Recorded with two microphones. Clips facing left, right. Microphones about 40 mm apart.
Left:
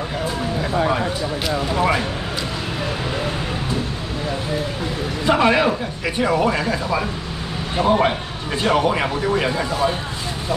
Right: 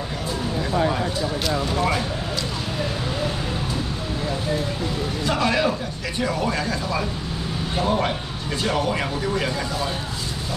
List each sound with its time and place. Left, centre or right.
1.7 s speech: left
5.2 s speech: left